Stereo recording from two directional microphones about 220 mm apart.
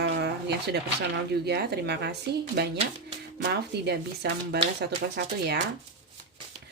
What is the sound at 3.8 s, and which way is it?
Speech, 50° right (ahead or behind).